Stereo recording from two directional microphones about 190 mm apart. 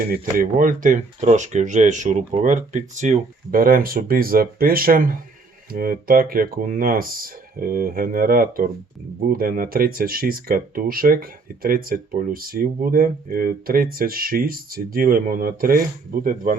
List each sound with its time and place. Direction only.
0.0 s speech: 50° right (ahead or behind)